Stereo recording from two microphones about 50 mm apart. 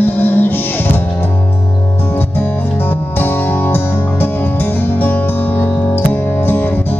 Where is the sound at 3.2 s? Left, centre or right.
Left.